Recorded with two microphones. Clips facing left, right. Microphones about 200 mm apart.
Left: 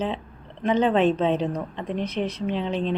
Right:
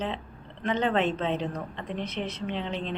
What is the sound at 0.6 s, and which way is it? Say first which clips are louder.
A woman's voice: left 6 dB; 15° left (ahead or behind).